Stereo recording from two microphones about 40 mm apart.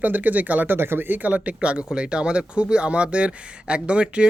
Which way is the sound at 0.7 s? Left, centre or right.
Right.